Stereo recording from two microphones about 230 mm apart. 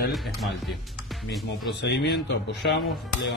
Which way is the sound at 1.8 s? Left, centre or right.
Left.